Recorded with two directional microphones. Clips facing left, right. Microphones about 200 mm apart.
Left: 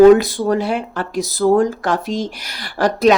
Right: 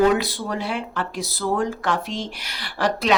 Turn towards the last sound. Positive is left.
turn(degrees=45)  # may be behind; listen again after turning